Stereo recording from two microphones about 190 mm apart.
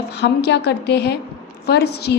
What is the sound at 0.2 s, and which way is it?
A woman's voice, 60° left (ahead or behind).